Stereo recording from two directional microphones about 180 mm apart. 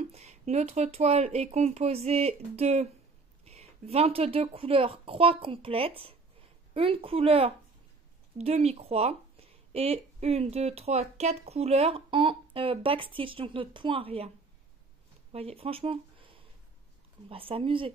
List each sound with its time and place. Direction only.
0.1 s speech: 35° right (ahead or behind)
15.3 s speech: 35° right (ahead or behind)